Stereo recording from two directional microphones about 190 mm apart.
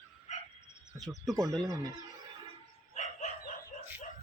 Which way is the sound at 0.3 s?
35° left (ahead or behind).